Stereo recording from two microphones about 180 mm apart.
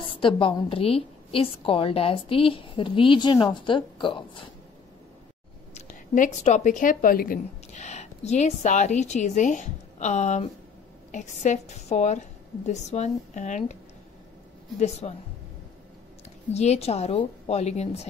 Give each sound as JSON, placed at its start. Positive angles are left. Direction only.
{"t": 0.0, "sound": "a woman's voice", "side_deg": 30}
{"t": 5.8, "sound": "a woman's voice", "side_deg": 45}
{"t": 14.8, "sound": "a woman's voice", "side_deg": 35}
{"t": 16.5, "sound": "a woman's voice", "side_deg": 35}